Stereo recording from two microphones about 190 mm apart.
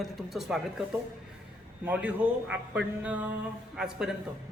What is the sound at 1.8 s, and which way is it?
A man's voice, 5° right (ahead or behind).